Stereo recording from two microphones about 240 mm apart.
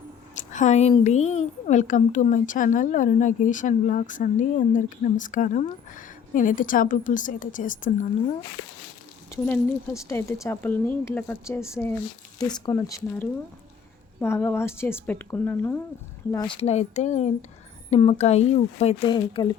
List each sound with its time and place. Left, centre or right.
0.5 s a woman's voice: left
9.3 s speech: centre